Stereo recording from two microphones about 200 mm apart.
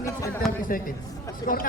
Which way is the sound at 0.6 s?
45° left (ahead or behind).